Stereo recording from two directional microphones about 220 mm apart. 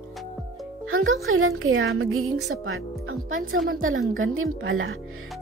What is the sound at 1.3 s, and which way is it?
Speech, 70° right (ahead or behind).